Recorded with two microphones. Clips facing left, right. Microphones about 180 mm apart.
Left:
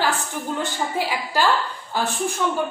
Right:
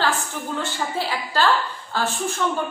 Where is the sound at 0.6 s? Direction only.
15° left (ahead or behind).